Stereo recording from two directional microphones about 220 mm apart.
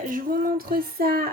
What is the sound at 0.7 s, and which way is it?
Child singing, 45° right (ahead or behind).